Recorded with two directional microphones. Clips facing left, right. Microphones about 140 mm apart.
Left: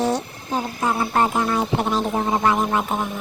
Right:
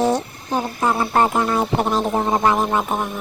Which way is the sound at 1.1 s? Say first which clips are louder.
Right 2 dB; 50° right (ahead or behind).